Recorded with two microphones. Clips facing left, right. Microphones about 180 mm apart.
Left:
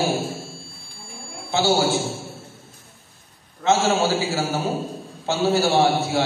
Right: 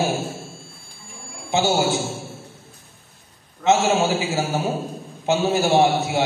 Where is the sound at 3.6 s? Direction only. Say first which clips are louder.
Right 1 dB; 20° right (ahead or behind).